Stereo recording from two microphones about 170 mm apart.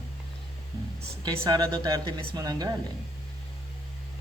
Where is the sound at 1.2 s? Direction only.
25° right (ahead or behind).